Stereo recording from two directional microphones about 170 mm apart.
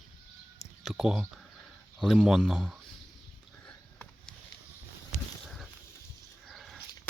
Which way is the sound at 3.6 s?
5° left (ahead or behind).